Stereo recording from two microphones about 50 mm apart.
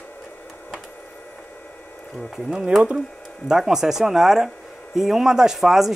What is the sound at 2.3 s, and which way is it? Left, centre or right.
Speech, centre.